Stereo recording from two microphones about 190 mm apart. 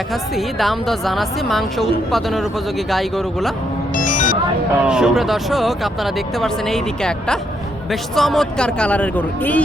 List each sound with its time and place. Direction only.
0.1 s speech: centre (ahead or behind)
3.9 s music: 45° left (ahead or behind)
4.8 s speech: 5° right (ahead or behind)